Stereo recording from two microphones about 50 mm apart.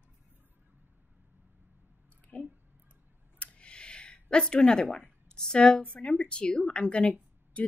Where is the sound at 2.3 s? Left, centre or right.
Left.